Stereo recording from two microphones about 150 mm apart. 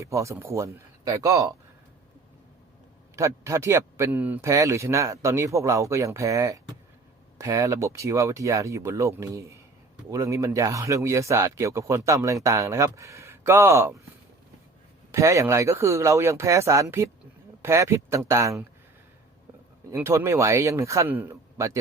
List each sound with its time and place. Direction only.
0.0 s speech: 20° right (ahead or behind)
3.2 s speech: 20° right (ahead or behind)
15.1 s speech: 20° right (ahead or behind)
19.9 s speech: 15° right (ahead or behind)